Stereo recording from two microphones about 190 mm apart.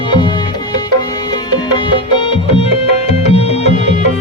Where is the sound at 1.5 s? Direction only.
25° left (ahead or behind).